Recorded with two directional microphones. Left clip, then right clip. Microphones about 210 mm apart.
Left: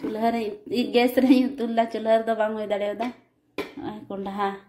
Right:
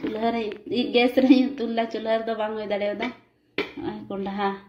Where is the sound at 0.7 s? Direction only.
5° left (ahead or behind).